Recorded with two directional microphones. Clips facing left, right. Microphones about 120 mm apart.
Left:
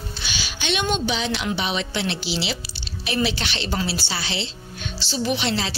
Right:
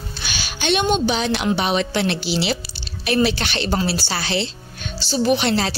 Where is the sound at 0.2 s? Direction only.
50° right (ahead or behind).